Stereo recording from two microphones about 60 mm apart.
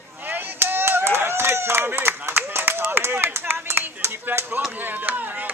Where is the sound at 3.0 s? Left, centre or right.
Right.